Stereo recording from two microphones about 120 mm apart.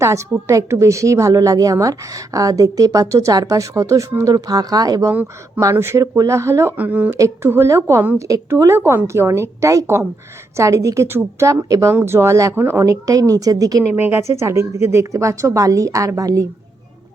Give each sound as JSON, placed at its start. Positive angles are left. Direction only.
{"t": 0.0, "sound": "a woman's voice", "side_deg": -25}
{"t": 13.9, "sound": "a woman's voice", "side_deg": -20}